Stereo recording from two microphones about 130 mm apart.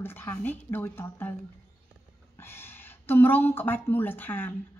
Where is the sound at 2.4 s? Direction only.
15° left (ahead or behind).